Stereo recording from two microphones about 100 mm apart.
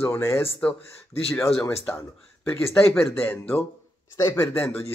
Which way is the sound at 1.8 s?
25° left (ahead or behind).